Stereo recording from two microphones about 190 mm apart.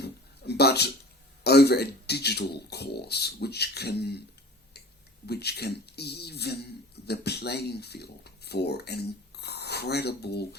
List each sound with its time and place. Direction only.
0.0 s a sound: 60° left (ahead or behind)
1.5 s speech: 60° left (ahead or behind)
5.2 s speech: 60° left (ahead or behind)